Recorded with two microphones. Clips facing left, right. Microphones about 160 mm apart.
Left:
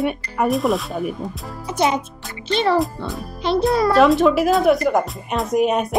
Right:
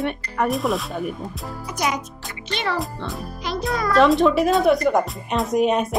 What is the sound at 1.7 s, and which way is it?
A child's voice, 25° left (ahead or behind).